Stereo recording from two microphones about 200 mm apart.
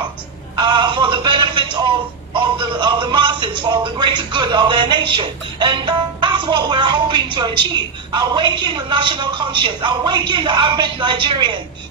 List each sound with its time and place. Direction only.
0.6 s speech: 25° right (ahead or behind)